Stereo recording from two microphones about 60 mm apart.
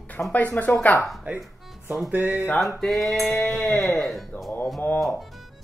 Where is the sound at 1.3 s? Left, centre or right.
Right.